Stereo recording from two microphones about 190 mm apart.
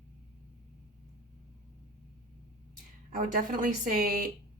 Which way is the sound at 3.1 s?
45° right (ahead or behind).